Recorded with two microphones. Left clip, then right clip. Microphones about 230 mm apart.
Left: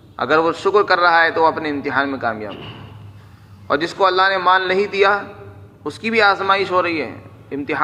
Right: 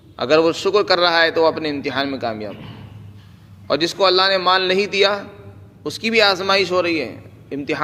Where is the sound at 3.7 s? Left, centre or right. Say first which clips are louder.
Even; right.